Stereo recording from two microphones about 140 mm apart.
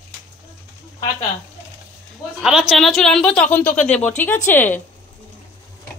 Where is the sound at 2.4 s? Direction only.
5° right (ahead or behind); by 4.8 s 15° left (ahead or behind).